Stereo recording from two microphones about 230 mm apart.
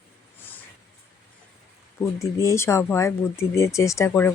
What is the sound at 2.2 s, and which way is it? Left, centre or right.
Speech, centre.